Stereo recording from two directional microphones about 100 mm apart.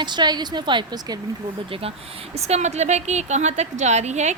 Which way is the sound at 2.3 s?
90° right.